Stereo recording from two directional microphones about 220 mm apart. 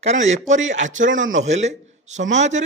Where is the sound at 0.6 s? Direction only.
60° right (ahead or behind).